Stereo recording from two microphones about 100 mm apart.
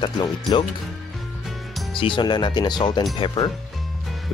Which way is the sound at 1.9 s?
55° left (ahead or behind).